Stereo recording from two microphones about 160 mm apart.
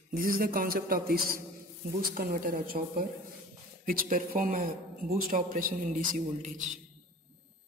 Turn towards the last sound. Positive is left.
turn(degrees=-50)  # may be behind; listen again after turning